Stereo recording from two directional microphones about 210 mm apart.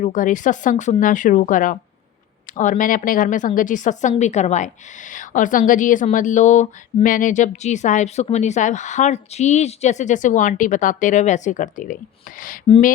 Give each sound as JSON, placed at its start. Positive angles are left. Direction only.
{"t": 0.0, "sound": "a woman's voice", "side_deg": 35}